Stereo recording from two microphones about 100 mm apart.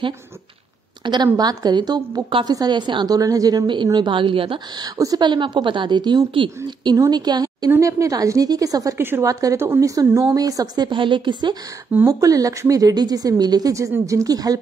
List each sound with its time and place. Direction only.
1.0 s a woman's voice: 45° right (ahead or behind)
4.7 s a woman's voice: 40° right (ahead or behind)
8.9 s a woman's voice: 20° right (ahead or behind)
9.2 s a woman's voice: 35° right (ahead or behind); by 11.5 s 50° right (ahead or behind)
12.1 s a woman's voice: 35° right (ahead or behind)